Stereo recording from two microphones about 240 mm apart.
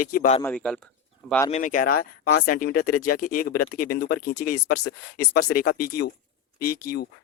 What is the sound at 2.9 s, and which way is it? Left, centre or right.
Speech, left.